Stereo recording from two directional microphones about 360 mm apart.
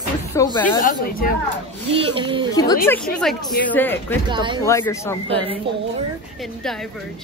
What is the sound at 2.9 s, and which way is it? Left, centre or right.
Speech, centre.